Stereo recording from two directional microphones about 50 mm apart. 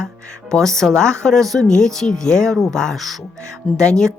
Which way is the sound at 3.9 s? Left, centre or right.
Centre.